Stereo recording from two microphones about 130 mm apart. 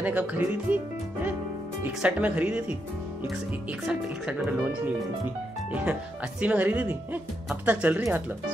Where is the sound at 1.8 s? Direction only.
10° right (ahead or behind).